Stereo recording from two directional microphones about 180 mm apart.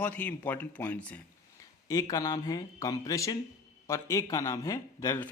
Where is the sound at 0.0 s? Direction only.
10° left (ahead or behind).